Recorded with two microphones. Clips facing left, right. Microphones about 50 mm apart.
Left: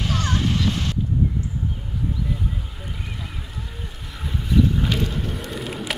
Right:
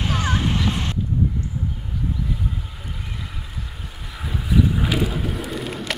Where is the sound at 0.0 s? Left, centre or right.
Centre.